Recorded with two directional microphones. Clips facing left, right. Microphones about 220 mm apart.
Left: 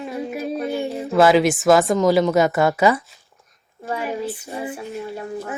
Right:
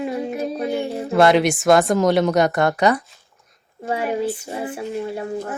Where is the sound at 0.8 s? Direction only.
Centre (ahead or behind).